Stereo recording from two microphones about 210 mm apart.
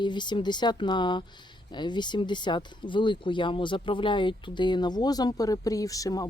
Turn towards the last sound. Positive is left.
turn(degrees=15)  # may be behind; listen again after turning